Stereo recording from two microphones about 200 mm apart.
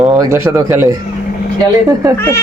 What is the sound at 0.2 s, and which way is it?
Speech, 15° right (ahead or behind).